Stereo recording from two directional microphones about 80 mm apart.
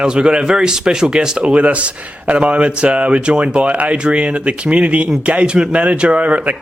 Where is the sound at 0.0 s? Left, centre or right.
Centre.